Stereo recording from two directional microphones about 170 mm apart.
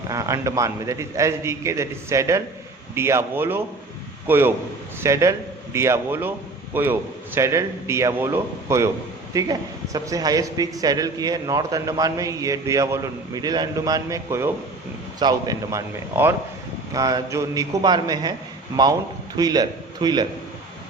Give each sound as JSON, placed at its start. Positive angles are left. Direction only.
{"t": 0.1, "sound": "a man's voice", "side_deg": -20}